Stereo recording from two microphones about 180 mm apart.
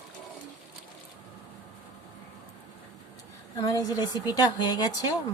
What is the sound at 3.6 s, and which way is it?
A woman's voice, 20° left (ahead or behind).